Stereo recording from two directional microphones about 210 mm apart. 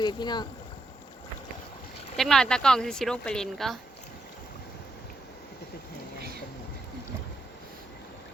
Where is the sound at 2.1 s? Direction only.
Centre (ahead or behind).